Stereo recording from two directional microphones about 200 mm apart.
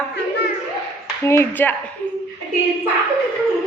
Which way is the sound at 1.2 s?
10° left (ahead or behind).